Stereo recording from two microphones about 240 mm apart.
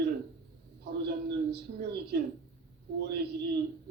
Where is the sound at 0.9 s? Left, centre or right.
Right.